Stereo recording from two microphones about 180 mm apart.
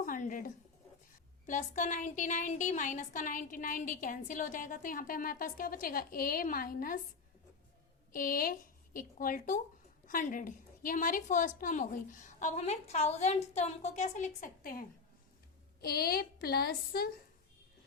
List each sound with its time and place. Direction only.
0.0 s a sound: 50° left (ahead or behind)
1.5 s speech: 45° left (ahead or behind)
8.1 s a woman's voice: 50° left (ahead or behind)